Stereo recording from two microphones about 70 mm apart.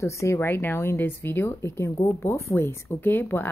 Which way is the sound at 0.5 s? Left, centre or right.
Left.